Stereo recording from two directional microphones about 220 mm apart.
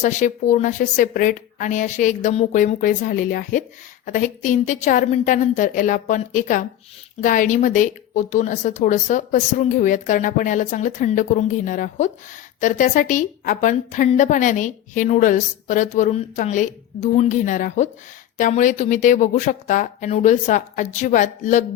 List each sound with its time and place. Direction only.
0.0 s a woman's voice: 35° left (ahead or behind)